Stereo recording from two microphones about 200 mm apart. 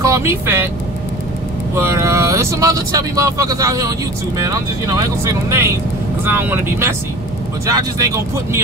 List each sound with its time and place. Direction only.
0.1 s speech: 15° right (ahead or behind)
1.8 s speech: 15° right (ahead or behind)